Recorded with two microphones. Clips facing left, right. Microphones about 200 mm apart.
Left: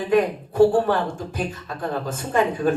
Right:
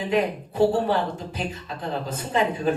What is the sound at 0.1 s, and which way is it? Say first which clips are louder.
Speech: left 5 dB; 50° left (ahead or behind).